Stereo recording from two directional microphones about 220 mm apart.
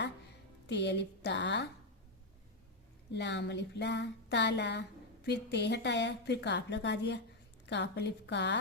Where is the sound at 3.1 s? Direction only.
50° left (ahead or behind).